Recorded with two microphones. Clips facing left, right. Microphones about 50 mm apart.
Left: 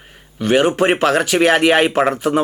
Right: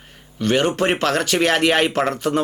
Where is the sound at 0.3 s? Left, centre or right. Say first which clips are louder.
Left 4 dB; centre.